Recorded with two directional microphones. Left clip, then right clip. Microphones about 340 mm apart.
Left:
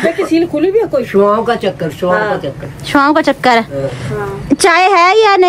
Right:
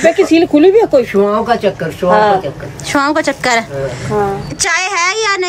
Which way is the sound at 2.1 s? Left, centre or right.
Right.